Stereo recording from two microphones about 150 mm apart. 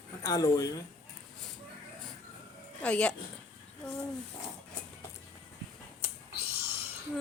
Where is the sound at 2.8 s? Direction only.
10° left (ahead or behind).